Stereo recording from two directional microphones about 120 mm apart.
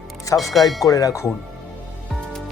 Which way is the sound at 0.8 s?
30° left (ahead or behind).